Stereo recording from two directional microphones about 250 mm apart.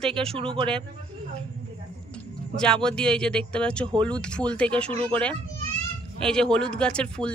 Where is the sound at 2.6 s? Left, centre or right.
Centre.